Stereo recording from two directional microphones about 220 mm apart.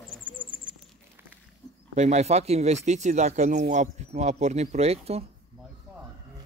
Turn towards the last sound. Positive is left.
turn(degrees=-30)  # may be behind; listen again after turning